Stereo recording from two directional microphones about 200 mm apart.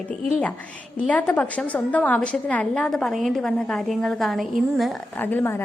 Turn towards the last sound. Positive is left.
turn(degrees=10)  # may be behind; listen again after turning